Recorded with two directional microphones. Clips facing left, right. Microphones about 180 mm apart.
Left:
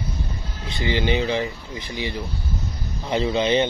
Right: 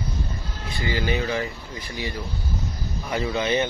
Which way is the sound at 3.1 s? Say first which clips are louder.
Left 4 dB; 20° left (ahead or behind).